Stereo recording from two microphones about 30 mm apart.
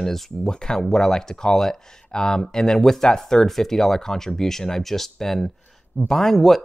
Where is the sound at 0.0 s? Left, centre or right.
Centre.